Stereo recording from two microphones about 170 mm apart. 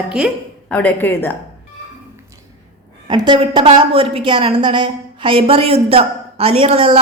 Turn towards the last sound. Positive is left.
turn(degrees=-35)  # may be behind; listen again after turning